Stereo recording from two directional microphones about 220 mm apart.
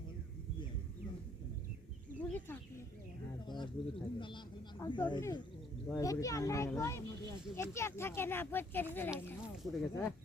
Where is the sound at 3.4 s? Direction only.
20° left (ahead or behind).